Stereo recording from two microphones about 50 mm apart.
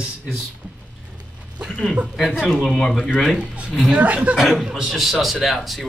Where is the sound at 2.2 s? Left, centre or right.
Centre.